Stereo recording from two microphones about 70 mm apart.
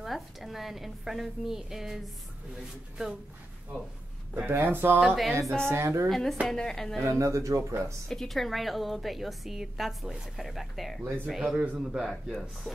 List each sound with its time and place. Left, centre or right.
0.0 s a woman's voice: centre
3.0 s speech: centre
4.5 s speech: right
5.0 s a woman's voice: centre
5.7 s a woman's voice: right
6.0 s a woman's voice: centre
7.2 s speech: right
8.1 s a woman's voice: centre
11.6 s speech: right
12.0 s a woman's voice: centre